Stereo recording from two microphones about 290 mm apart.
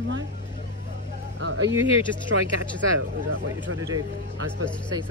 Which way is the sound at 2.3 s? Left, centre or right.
Right.